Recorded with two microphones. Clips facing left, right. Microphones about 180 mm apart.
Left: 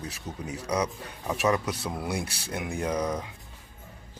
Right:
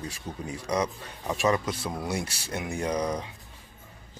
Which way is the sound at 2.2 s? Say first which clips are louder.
Even; 60° left (ahead or behind).